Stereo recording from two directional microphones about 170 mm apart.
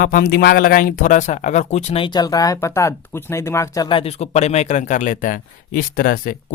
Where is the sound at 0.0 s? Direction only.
60° left (ahead or behind); by 3.8 s 15° left (ahead or behind).